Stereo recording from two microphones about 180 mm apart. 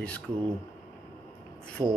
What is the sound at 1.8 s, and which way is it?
Rub, 20° right (ahead or behind).